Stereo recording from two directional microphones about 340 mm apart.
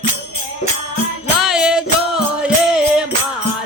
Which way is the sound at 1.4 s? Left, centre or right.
Centre.